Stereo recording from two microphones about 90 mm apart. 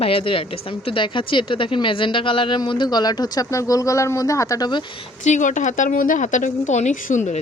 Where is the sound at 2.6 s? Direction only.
60° left (ahead or behind); by 4.7 s 40° left (ahead or behind).